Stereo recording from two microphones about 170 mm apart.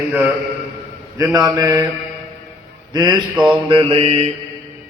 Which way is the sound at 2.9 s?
25° right (ahead or behind).